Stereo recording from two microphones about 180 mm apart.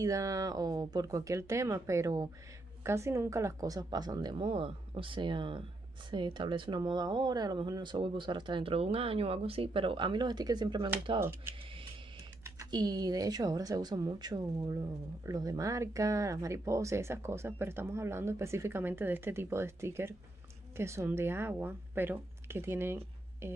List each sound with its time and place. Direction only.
0.0 s speech: 20° right (ahead or behind)
11.1 s a woman's voice: 15° right (ahead or behind)